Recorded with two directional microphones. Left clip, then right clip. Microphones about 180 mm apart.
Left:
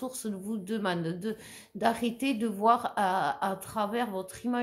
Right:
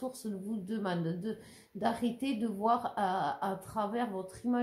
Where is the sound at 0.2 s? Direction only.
30° left (ahead or behind).